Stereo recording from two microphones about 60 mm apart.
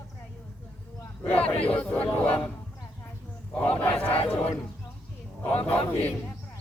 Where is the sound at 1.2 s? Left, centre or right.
Left.